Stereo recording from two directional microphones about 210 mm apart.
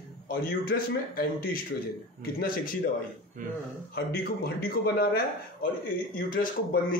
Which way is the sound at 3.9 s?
50° left (ahead or behind).